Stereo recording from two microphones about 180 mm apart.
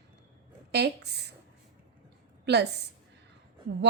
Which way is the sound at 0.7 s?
65° right (ahead or behind).